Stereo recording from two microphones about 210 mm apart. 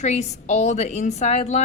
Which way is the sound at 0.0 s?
30° left (ahead or behind).